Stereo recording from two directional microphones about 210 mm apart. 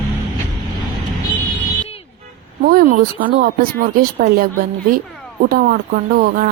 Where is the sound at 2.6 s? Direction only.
45° right (ahead or behind).